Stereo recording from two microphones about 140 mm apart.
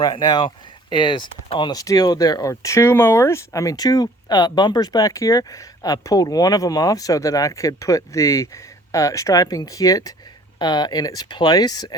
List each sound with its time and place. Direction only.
0.0 s speech: 35° left (ahead or behind)